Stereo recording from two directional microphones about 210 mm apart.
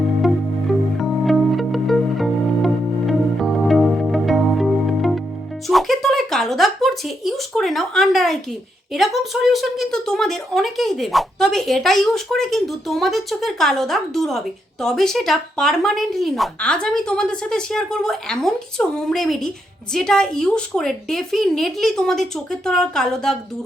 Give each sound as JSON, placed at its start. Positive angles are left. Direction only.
{"t": 0.2, "sound": "music", "side_deg": 0}
{"t": 8.9, "sound": "a woman's voice", "side_deg": 0}